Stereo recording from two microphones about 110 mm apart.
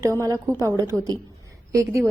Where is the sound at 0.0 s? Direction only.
30° right (ahead or behind).